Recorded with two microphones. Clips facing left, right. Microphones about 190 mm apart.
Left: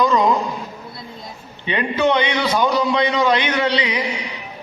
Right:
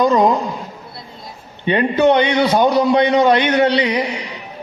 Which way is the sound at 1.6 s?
50° right (ahead or behind).